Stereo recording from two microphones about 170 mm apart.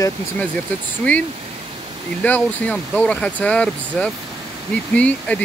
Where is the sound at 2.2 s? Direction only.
10° left (ahead or behind).